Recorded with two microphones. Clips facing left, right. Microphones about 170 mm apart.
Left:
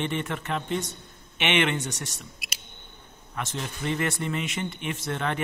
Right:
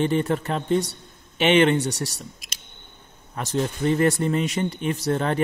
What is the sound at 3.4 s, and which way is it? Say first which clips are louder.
A man's voice: right 8 dB; 40° right (ahead or behind).